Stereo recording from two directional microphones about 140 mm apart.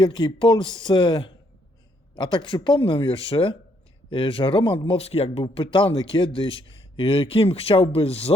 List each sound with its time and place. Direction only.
0.0 s speech: 30° left (ahead or behind)